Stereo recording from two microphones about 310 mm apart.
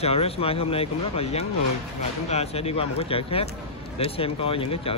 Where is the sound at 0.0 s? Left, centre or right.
Centre.